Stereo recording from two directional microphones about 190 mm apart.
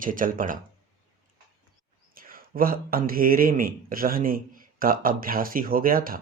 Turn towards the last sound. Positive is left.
turn(degrees=-50)  # may be behind; listen again after turning